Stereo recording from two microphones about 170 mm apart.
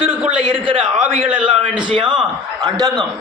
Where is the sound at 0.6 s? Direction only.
30° right (ahead or behind).